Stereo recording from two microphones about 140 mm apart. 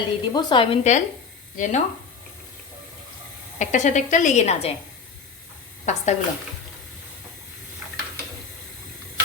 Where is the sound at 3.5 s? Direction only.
60° left (ahead or behind).